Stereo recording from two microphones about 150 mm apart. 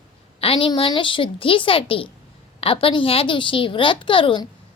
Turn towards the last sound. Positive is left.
turn(degrees=35)  # may be behind; listen again after turning